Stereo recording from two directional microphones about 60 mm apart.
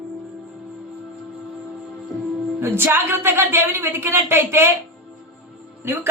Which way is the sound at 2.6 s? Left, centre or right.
Right.